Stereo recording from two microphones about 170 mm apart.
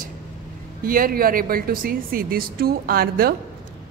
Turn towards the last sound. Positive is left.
turn(degrees=-65)  # may be behind; listen again after turning